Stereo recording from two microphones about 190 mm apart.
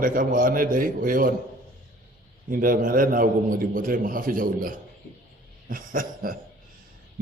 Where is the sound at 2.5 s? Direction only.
45° right (ahead or behind).